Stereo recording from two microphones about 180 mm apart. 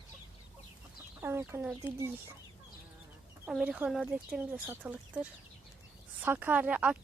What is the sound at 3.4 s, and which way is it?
Speech, 5° right (ahead or behind).